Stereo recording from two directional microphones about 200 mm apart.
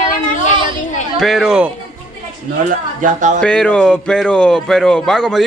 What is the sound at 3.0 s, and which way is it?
Speech, 40° right (ahead or behind).